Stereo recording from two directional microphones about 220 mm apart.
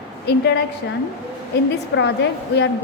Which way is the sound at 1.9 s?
50° left (ahead or behind).